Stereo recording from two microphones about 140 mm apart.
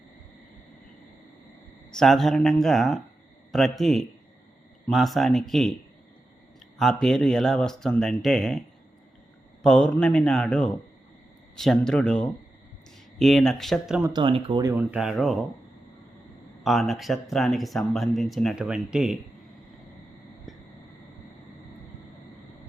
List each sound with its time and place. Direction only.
1.9 s speech: 5° left (ahead or behind)
6.7 s speech: centre (ahead or behind)
9.6 s speech: 5° left (ahead or behind)
14.0 s speech: 35° right (ahead or behind)
14.6 s speech: 15° right (ahead or behind)
16.6 s speech: centre (ahead or behind)